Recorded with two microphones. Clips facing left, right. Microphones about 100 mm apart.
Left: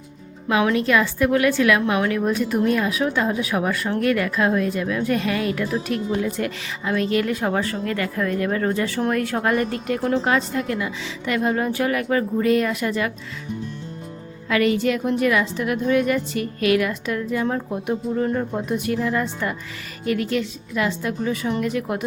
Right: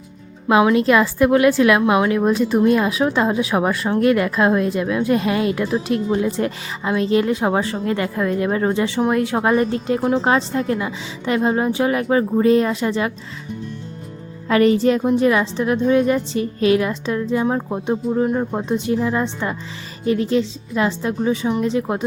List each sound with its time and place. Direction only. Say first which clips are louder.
0.4 s a woman's voice: right 5 dB; 25° right (ahead or behind)
14.4 s a woman's voice: right 5 dB; 35° right (ahead or behind); by 18.4 s 15° right (ahead or behind)
18.5 s a woman's voice: right 3 dB; 25° right (ahead or behind)